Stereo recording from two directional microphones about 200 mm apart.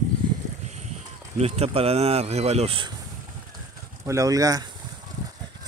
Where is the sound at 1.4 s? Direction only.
30° right (ahead or behind).